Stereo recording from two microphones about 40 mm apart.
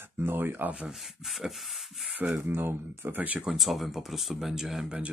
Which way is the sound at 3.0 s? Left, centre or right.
Right.